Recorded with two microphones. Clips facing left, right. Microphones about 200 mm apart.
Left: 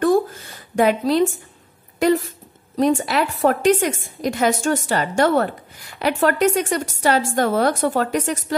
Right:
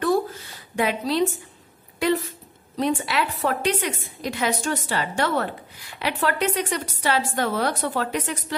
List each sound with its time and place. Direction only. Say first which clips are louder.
0.7 s a woman's voice: left 6 dB; 50° left (ahead or behind)